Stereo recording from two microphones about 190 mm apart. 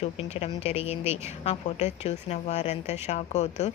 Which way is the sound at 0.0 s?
30° left (ahead or behind).